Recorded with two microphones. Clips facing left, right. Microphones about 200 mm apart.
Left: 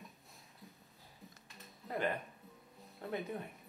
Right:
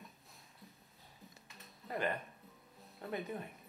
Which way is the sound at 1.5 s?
Centre (ahead or behind).